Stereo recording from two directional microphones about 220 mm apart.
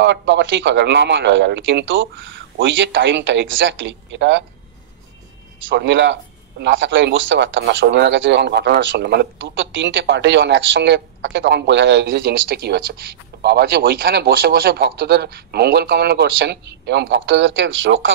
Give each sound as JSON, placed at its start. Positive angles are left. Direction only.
{"t": 0.0, "sound": "speech", "side_deg": -55}
{"t": 5.7, "sound": "speech", "side_deg": -55}